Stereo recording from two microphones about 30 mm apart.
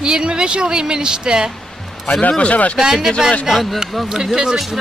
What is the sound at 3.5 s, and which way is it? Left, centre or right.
Speech, centre.